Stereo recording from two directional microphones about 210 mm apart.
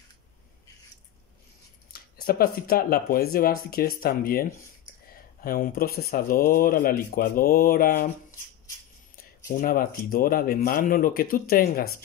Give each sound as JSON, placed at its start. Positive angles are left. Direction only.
{"t": 1.9, "sound": "speech", "side_deg": 45}
{"t": 9.1, "sound": "speech", "side_deg": 40}